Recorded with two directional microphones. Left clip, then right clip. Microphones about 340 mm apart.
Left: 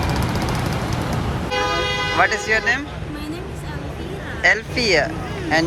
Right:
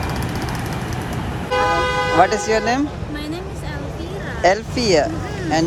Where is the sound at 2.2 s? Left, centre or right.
Centre.